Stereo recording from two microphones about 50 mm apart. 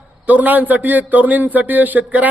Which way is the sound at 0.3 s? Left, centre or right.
Right.